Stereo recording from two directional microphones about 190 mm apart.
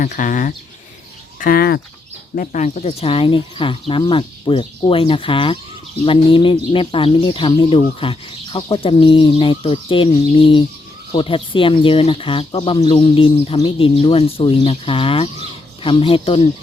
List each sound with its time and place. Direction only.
0.0 s speech: 45° left (ahead or behind)